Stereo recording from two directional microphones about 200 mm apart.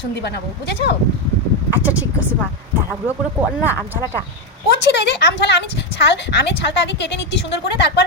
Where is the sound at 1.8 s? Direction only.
10° right (ahead or behind).